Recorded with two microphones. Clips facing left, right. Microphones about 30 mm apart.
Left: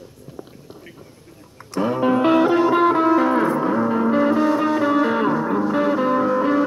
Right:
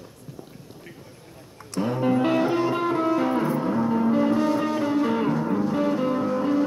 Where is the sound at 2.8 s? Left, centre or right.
Left.